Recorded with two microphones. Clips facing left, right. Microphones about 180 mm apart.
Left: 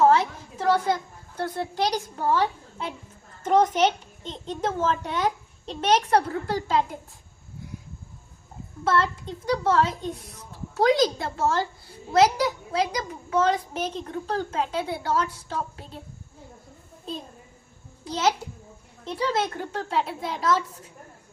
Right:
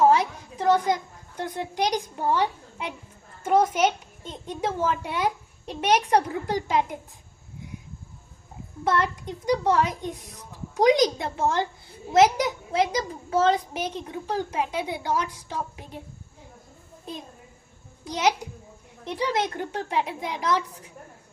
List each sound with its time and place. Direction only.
0.1 s a woman's voice: 15° right (ahead or behind)
8.8 s a child's voice: 15° right (ahead or behind)
13.7 s a child's voice: 10° right (ahead or behind)
17.1 s a child's voice: 10° right (ahead or behind)